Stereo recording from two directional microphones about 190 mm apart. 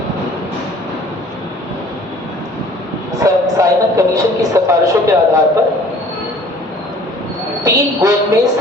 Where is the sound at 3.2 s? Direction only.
15° right (ahead or behind).